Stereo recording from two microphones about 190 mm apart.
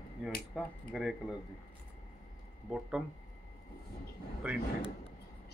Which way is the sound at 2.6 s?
5° right (ahead or behind).